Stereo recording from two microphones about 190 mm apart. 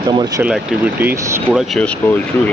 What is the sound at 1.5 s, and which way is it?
Speech, centre (ahead or behind).